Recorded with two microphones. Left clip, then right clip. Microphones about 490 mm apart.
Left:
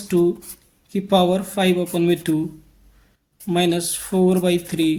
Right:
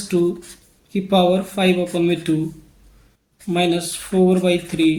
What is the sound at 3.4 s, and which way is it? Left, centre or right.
A woman's voice, left.